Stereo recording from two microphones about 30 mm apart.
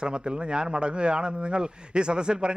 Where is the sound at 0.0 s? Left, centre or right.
Right.